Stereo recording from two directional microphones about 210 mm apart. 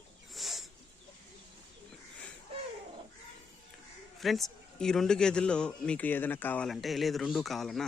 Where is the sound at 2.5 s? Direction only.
25° right (ahead or behind).